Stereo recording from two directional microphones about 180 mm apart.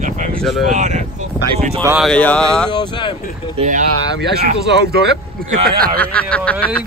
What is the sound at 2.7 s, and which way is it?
Speech, 25° left (ahead or behind).